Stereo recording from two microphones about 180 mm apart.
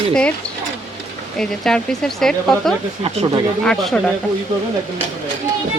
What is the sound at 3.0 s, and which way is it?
Speech, 30° right (ahead or behind).